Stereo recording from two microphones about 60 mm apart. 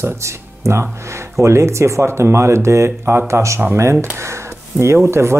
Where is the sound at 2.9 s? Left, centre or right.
Right.